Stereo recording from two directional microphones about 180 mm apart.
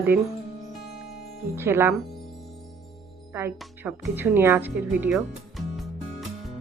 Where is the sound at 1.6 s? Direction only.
15° right (ahead or behind).